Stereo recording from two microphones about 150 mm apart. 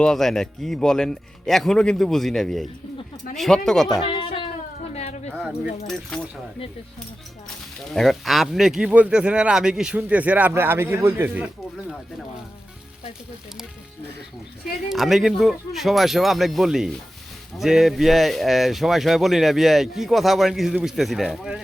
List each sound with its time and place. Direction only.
0.0 s speech: 5° left (ahead or behind)
4.0 s a sound: 35° left (ahead or behind)
5.3 s keys jangling: centre (ahead or behind)
5.9 s speech: 5° left (ahead or behind)
7.9 s speech: centre (ahead or behind); by 11.4 s 15° right (ahead or behind)
14.8 s speech: centre (ahead or behind)